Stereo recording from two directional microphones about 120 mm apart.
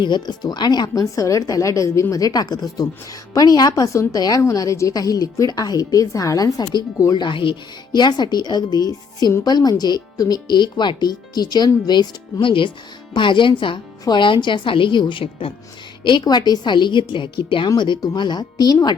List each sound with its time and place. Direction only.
0.0 s a woman's voice: 40° left (ahead or behind)
16.0 s speech: 35° left (ahead or behind)